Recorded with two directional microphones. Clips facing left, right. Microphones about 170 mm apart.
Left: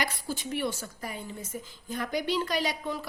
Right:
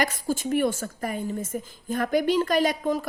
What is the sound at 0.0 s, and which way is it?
A woman's voice, 45° right (ahead or behind).